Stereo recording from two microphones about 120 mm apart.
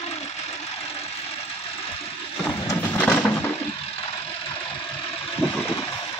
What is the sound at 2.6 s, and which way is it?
Horse, 20° left (ahead or behind).